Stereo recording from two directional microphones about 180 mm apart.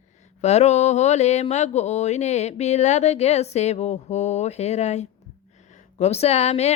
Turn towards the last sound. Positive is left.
turn(degrees=35)  # may be behind; listen again after turning